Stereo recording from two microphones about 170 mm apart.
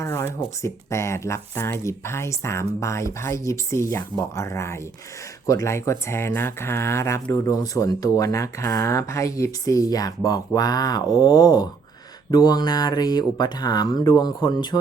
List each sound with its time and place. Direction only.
0.0 s speech: 15° left (ahead or behind)